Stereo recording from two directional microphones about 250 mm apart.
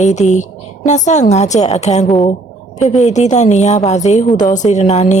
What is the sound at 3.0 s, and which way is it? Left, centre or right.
A woman's voice, left.